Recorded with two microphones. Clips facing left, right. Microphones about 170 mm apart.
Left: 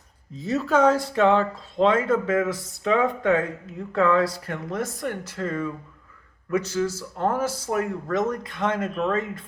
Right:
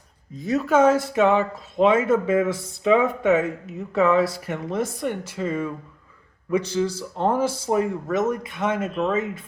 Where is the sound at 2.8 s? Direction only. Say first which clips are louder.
Right 3 dB; 15° right (ahead or behind).